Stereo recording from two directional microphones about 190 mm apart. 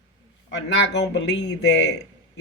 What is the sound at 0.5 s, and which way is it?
A man's voice, 65° left (ahead or behind).